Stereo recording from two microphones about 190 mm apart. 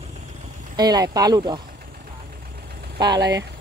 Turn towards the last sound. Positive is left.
turn(degrees=-20)  # may be behind; listen again after turning